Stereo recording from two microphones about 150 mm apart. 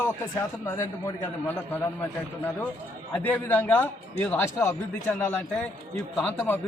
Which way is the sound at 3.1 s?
10° left (ahead or behind).